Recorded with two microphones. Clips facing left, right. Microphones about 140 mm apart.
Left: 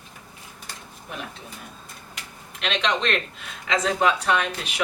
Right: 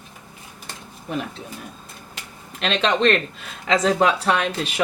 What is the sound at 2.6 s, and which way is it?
Speech, 35° right (ahead or behind).